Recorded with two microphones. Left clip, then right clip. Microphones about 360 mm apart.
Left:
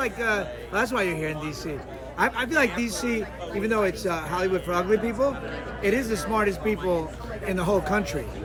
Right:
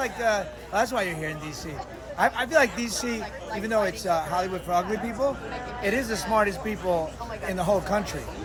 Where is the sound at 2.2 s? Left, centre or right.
Centre.